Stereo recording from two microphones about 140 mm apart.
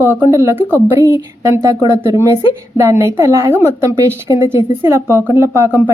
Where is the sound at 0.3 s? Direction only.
20° right (ahead or behind).